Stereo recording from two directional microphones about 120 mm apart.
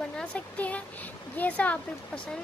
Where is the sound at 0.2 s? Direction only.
10° left (ahead or behind).